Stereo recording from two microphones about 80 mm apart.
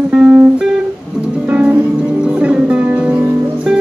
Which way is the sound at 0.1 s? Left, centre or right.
Centre.